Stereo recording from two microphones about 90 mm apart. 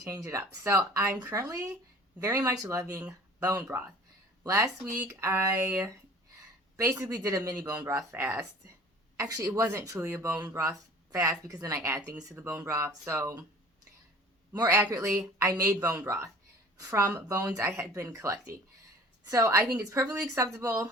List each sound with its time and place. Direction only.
0.0 s speech: 35° right (ahead or behind)
6.7 s speech: 35° right (ahead or behind)
14.5 s speech: 40° right (ahead or behind)